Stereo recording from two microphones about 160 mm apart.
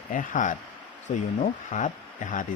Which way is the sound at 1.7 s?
55° left (ahead or behind).